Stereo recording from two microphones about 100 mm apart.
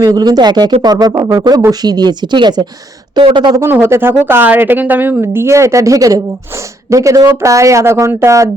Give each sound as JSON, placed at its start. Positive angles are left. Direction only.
{"t": 0.0, "sound": "speech", "side_deg": -35}
{"t": 3.6, "sound": "speech", "side_deg": -25}